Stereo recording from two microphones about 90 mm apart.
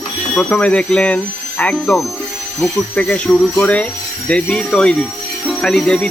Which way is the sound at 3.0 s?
10° left (ahead or behind).